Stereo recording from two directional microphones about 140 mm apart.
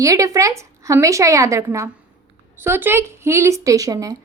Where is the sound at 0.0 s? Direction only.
25° right (ahead or behind).